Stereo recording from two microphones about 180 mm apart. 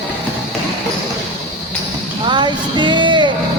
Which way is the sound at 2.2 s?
25° right (ahead or behind).